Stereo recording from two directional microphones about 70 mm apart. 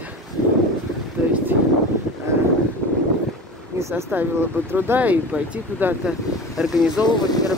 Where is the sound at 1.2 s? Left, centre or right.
Right.